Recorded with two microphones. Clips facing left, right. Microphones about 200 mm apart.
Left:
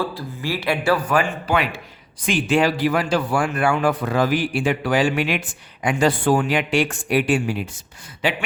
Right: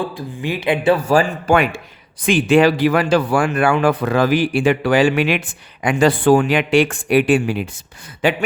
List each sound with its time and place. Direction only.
0.0 s speech: 20° right (ahead or behind)
1.5 s speech: 50° right (ahead or behind)
2.5 s speech: 90° right; by 7.6 s 60° right (ahead or behind)
8.2 s speech: 50° right (ahead or behind)